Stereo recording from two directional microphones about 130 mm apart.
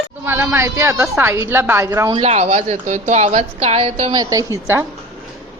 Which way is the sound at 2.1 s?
55° right (ahead or behind).